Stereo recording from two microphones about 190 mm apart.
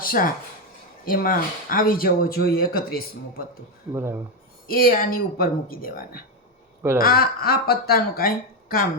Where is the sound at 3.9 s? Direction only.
15° right (ahead or behind).